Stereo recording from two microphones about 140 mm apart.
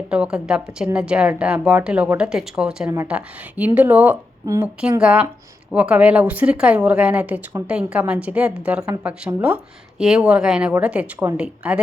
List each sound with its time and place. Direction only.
0.1 s a woman's voice: 5° right (ahead or behind)
4.8 s a woman's voice: 5° right (ahead or behind)